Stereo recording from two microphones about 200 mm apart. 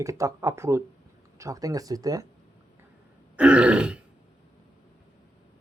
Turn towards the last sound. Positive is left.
turn(degrees=-5)  # may be behind; listen again after turning